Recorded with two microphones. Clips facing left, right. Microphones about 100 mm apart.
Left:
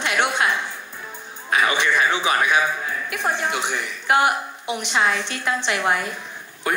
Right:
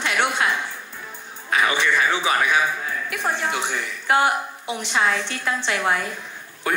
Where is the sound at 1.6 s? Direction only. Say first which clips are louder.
Even; 15° left (ahead or behind).